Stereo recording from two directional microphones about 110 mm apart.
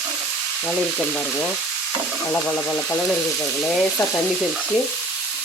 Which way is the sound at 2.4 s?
15° left (ahead or behind).